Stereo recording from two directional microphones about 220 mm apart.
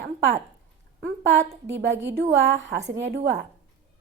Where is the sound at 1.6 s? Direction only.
55° right (ahead or behind).